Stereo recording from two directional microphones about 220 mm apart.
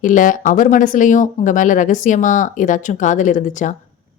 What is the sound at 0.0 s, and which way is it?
Speech, 35° left (ahead or behind).